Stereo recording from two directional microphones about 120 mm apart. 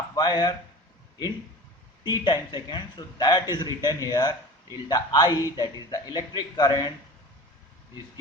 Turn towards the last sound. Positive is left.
turn(degrees=35)  # may be behind; listen again after turning